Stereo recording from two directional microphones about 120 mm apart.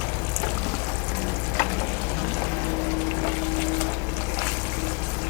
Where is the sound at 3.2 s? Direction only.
20° left (ahead or behind).